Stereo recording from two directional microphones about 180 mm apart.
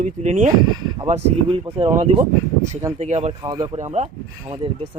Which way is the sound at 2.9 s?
40° right (ahead or behind).